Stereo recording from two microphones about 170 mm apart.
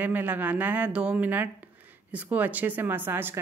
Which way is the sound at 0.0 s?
10° right (ahead or behind).